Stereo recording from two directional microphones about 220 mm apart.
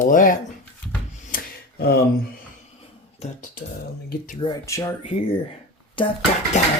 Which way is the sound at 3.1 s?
35° left (ahead or behind).